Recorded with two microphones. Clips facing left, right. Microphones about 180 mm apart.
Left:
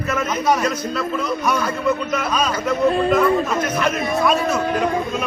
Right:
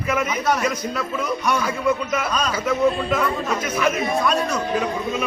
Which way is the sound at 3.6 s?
10° right (ahead or behind).